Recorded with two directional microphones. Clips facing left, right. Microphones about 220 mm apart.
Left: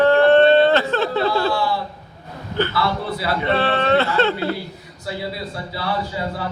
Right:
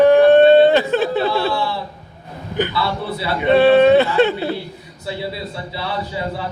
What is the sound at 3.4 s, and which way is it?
Speech, 15° right (ahead or behind).